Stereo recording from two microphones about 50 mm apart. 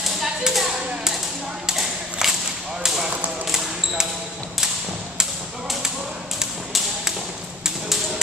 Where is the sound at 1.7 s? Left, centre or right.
Centre.